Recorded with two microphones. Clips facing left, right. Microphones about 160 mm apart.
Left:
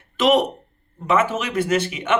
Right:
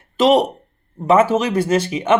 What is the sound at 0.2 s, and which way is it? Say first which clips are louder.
Speech: right 3 dB; 35° right (ahead or behind).